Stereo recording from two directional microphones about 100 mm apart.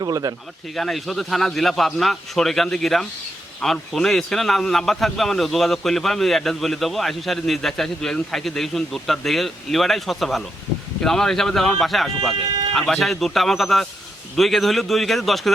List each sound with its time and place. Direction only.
0.0 s speech: 40° right (ahead or behind)
0.8 s a man's voice: centre (ahead or behind)